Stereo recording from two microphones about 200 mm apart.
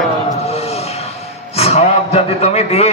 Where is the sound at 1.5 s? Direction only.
30° left (ahead or behind).